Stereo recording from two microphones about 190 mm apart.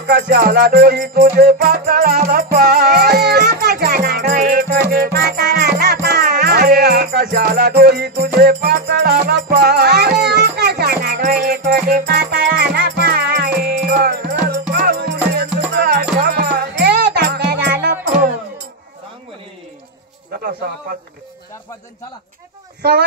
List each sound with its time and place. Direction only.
0.0 s music: 55° right (ahead or behind)
22.8 s speech: 55° right (ahead or behind)